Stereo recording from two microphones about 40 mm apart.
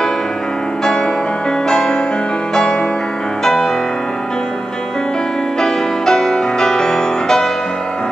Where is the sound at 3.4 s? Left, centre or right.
Centre.